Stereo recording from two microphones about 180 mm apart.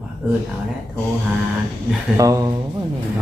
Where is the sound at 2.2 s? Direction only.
20° right (ahead or behind).